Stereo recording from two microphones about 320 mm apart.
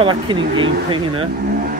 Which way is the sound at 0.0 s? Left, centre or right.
Centre.